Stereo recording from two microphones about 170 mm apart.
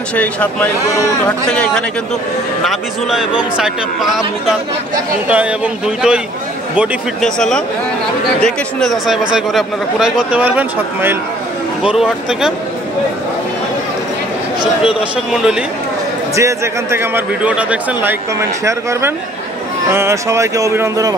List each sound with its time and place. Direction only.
0.1 s a man's voice: 10° left (ahead or behind)
15.3 s a man's voice: 5° right (ahead or behind)
16.3 s speech: 15° right (ahead or behind)